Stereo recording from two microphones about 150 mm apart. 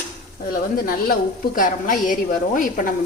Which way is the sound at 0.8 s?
80° left.